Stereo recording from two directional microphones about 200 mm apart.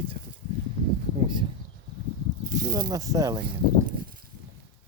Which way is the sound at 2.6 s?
20° right (ahead or behind).